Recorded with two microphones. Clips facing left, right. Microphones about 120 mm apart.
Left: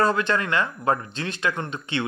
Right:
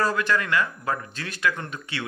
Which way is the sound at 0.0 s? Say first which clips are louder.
Left 2 dB; 25° left (ahead or behind).